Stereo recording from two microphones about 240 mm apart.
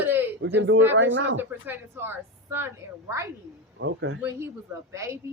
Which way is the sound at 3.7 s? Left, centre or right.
Right.